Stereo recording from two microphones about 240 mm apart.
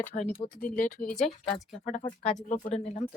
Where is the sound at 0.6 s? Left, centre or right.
Left.